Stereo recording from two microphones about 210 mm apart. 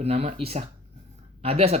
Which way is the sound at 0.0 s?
30° right (ahead or behind).